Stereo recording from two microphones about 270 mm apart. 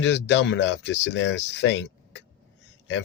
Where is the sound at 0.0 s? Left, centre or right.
Left.